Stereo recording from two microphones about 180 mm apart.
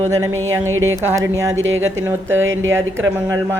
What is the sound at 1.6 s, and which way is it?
Speech, 90° right.